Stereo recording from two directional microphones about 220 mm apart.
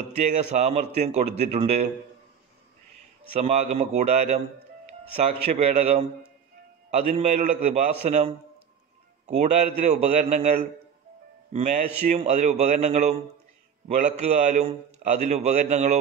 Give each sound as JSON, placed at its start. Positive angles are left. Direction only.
{"t": 0.2, "sound": "a man's voice", "side_deg": -30}
{"t": 3.3, "sound": "a man's voice", "side_deg": -30}